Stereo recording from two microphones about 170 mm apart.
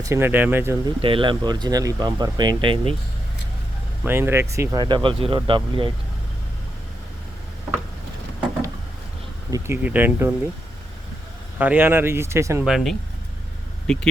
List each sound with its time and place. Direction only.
0.0 s speech: 15° right (ahead or behind)
0.9 s speech: 30° right (ahead or behind)
4.0 s speech: 15° right (ahead or behind); by 5.9 s 30° right (ahead or behind)
9.5 s speech: 10° right (ahead or behind)
11.5 s speech: 10° right (ahead or behind)
12.6 s speech: centre (ahead or behind)